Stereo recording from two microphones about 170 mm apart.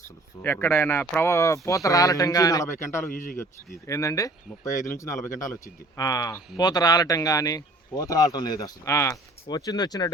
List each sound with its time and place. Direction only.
0.4 s speech: 10° left (ahead or behind)
3.1 s speech: 55° left (ahead or behind)
3.3 s speech: 15° left (ahead or behind)